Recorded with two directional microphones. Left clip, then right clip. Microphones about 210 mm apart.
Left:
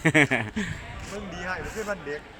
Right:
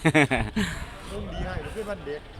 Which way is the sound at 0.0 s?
10° right (ahead or behind).